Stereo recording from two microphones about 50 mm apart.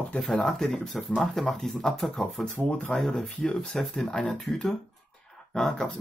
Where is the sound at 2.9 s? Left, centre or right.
Centre.